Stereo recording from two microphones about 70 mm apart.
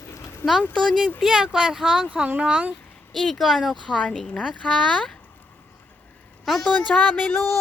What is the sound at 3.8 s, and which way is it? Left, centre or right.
Speech, centre.